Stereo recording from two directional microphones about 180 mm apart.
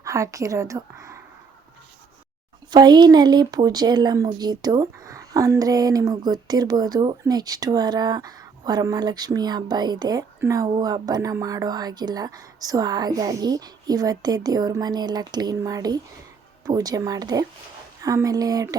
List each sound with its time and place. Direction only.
0.0 s a woman's voice: 15° right (ahead or behind)
2.6 s speech: 25° right (ahead or behind)